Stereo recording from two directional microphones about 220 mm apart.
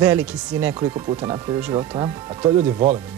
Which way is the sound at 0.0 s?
5° right (ahead or behind).